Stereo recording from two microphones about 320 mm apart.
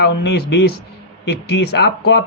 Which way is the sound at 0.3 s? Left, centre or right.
Left.